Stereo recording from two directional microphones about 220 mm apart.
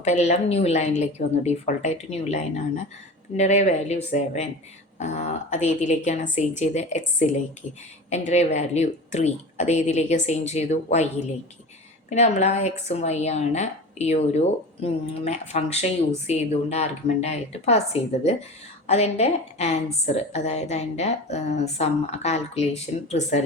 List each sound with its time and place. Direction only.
0.0 s a woman's voice: 30° left (ahead or behind)